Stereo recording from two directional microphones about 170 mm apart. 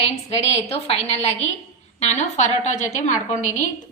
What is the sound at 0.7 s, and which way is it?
A woman's voice, 35° left (ahead or behind).